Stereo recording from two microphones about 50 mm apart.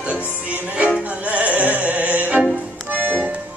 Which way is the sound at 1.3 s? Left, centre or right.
Right.